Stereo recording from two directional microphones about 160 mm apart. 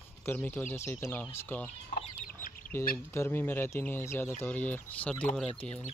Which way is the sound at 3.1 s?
15° left (ahead or behind).